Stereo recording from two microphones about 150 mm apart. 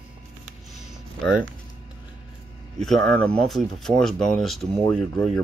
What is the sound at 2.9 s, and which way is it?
Speech, 5° left (ahead or behind).